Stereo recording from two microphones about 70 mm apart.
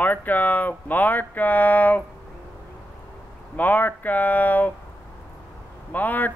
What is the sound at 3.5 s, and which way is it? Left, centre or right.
Speech, left.